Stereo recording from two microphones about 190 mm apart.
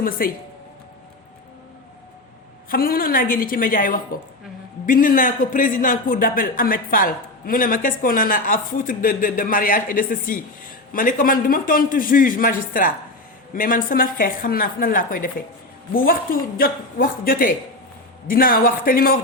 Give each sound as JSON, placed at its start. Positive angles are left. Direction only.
{"t": 0.0, "sound": "speech", "side_deg": 50}
{"t": 2.6, "sound": "speech", "side_deg": 50}